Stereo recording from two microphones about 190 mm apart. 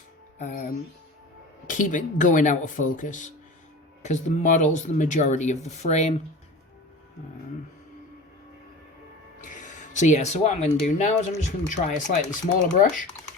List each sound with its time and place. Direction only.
0.3 s speech: 40° left (ahead or behind)
9.4 s speech: 40° left (ahead or behind)